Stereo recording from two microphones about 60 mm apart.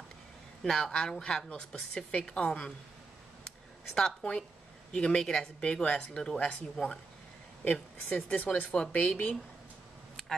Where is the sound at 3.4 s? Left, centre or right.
Centre.